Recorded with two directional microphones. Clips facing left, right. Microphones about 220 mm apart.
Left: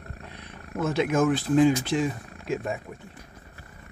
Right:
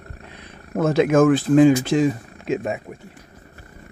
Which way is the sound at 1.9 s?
75° right (ahead or behind).